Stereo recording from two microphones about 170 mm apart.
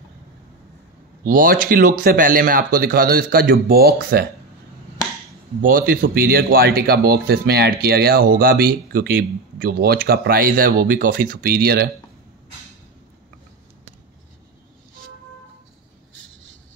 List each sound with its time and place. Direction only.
1.2 s speech: 55° right (ahead or behind)
5.6 s speech: 55° right (ahead or behind)